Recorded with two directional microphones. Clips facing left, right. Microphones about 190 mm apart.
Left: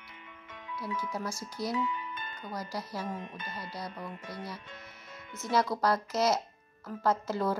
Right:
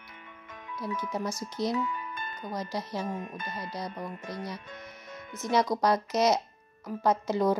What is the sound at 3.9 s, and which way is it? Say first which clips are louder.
Speech: right 3 dB; 45° right (ahead or behind).